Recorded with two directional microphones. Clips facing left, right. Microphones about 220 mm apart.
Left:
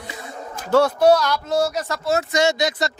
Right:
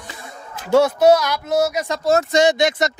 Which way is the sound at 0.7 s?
10° right (ahead or behind).